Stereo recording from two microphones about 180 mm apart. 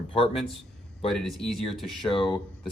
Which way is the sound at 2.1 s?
30° left (ahead or behind).